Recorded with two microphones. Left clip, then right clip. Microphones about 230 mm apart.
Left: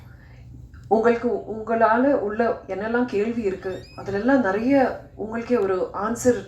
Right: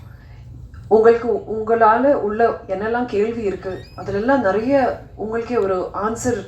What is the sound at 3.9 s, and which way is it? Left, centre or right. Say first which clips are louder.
Speech: right 3 dB; left.